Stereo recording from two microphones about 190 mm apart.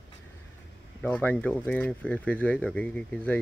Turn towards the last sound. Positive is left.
turn(degrees=5)  # may be behind; listen again after turning